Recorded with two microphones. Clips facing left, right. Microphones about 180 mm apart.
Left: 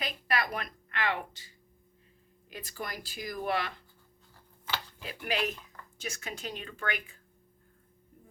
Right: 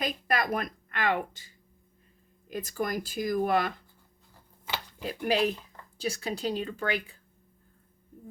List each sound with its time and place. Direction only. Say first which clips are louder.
0.0 s speech: right 4 dB; 45° right (ahead or behind)
2.5 s speech: right 9 dB; 45° right (ahead or behind)
5.0 s speech: right 7 dB; 35° right (ahead or behind)